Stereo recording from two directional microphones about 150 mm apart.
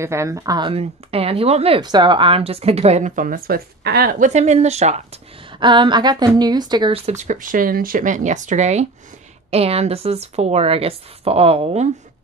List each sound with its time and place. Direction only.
0.0 s speech: 20° right (ahead or behind); by 1.8 s 40° right (ahead or behind)
1.8 s speech: 30° right (ahead or behind); by 4.3 s 75° right (ahead or behind)
4.3 s speech: 50° right (ahead or behind)
5.5 s a woman's voice: 30° right (ahead or behind)
7.1 s speech: 55° right (ahead or behind)